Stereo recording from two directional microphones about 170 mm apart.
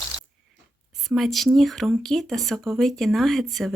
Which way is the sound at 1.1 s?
Centre (ahead or behind).